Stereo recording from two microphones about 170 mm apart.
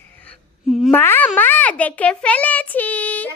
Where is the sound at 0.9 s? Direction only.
10° left (ahead or behind).